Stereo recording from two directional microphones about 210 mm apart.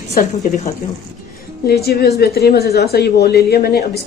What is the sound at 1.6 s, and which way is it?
A woman's voice, 50° left (ahead or behind).